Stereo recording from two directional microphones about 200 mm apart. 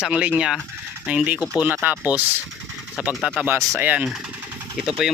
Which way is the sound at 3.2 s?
Centre (ahead or behind).